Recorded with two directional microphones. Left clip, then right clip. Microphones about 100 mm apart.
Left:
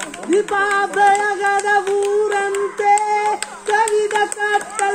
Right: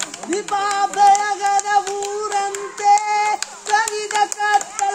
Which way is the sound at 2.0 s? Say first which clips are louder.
Left 4 dB; 35° right (ahead or behind).